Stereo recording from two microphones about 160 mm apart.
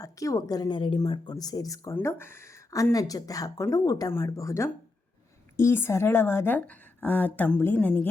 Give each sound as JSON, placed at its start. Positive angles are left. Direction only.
{"t": 0.0, "sound": "a woman's voice", "side_deg": 20}